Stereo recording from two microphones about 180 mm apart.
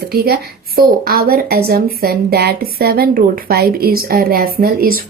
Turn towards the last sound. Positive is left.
turn(degrees=-55)  # may be behind; listen again after turning